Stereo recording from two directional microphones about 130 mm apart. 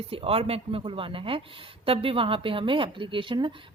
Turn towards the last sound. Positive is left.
turn(degrees=-40)  # may be behind; listen again after turning